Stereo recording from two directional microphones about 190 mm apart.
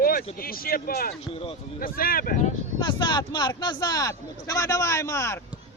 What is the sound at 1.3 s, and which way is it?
Speech, 30° left (ahead or behind).